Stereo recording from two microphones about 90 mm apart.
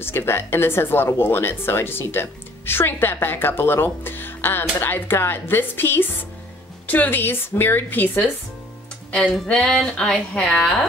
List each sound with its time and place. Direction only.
0.0 s speech: 25° left (ahead or behind); by 10.9 s 5° left (ahead or behind)